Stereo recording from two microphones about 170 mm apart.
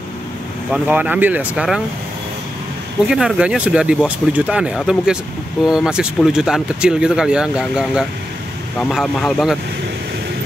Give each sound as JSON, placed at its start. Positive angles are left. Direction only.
{"t": 0.7, "sound": "speech", "side_deg": -10}
{"t": 3.1, "sound": "speech", "side_deg": -5}